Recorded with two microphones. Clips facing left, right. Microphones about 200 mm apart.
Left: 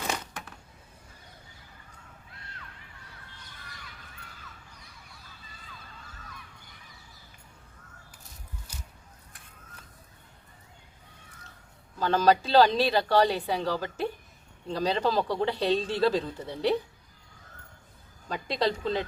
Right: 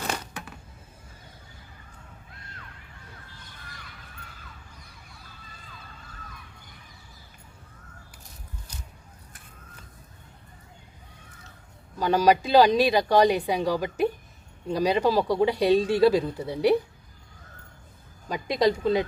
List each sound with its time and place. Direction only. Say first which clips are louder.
8.7 s a sound: right 2 dB; 10° left (ahead or behind)
11.9 s a woman's voice: right 2 dB; 15° right (ahead or behind)
18.3 s a woman's voice: right 5 dB; 15° right (ahead or behind)